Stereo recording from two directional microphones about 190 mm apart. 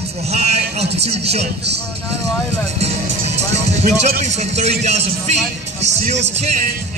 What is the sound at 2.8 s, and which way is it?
Speech, 35° right (ahead or behind).